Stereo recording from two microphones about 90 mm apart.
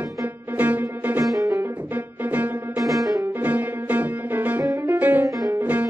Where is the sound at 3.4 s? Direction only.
15° right (ahead or behind).